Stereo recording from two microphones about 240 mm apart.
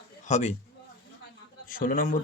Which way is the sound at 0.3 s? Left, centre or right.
Left.